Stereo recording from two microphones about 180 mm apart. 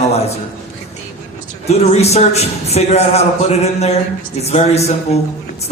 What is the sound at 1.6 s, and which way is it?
A man's voice, 35° left (ahead or behind).